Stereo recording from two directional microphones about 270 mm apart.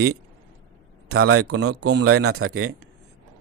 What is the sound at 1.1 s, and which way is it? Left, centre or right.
Speech, right.